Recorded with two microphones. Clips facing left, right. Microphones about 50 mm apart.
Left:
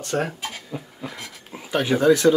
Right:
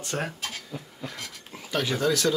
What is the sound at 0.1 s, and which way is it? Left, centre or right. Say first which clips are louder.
Speech: left 6 dB; centre.